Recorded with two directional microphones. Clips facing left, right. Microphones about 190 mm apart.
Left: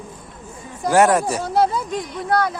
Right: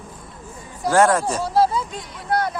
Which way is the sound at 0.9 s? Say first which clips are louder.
Left 1 dB; 15° left (ahead or behind).